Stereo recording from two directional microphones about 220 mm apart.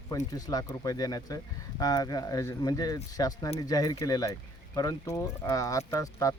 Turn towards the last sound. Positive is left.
turn(degrees=15)  # may be behind; listen again after turning